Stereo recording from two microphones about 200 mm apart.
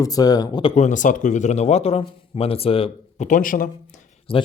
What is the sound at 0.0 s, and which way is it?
Speech, 20° left (ahead or behind).